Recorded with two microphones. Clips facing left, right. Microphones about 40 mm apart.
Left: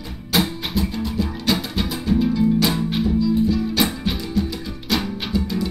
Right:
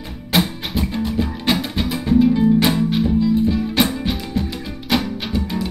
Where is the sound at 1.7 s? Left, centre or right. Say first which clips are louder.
Right 2 dB; centre.